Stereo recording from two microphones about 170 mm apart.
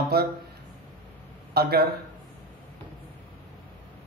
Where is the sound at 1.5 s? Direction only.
65° right (ahead or behind).